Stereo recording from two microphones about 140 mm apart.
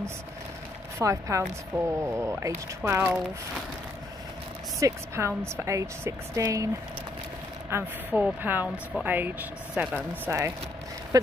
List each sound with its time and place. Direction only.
0.9 s speech: 20° right (ahead or behind)
4.7 s speech: 20° right (ahead or behind)
7.7 s speech: 15° right (ahead or behind)